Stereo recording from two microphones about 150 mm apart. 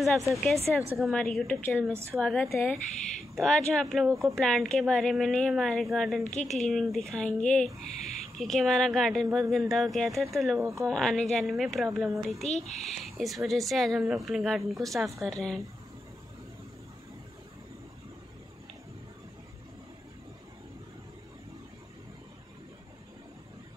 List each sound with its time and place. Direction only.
0.0 s speech: centre (ahead or behind)
2.4 s speech: 20° left (ahead or behind)
3.3 s speech: 5° left (ahead or behind)
4.1 s speech: 20° right (ahead or behind)
4.4 s speech: 5° left (ahead or behind)
10.6 s speech: 20° right (ahead or behind)
10.9 s speech: 5° left (ahead or behind)
12.4 s speech: 50° left (ahead or behind)
12.8 s speech: centre (ahead or behind)